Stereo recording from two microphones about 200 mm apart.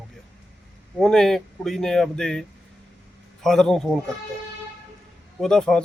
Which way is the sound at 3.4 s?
Centre (ahead or behind).